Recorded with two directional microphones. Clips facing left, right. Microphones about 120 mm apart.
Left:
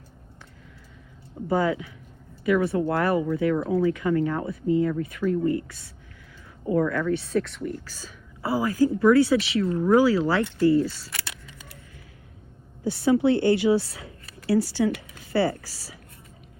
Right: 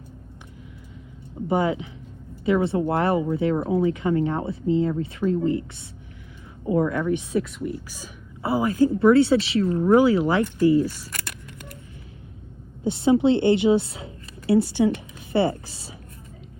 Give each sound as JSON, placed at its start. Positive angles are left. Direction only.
{"t": 1.5, "sound": "a woman's voice", "side_deg": -20}
{"t": 11.2, "sound": "scissors", "side_deg": -55}
{"t": 12.8, "sound": "a woman's voice", "side_deg": -20}